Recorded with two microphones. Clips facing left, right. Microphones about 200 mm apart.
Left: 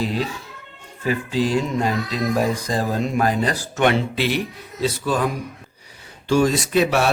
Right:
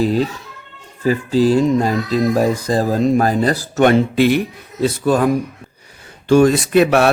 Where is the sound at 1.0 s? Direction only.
40° right (ahead or behind).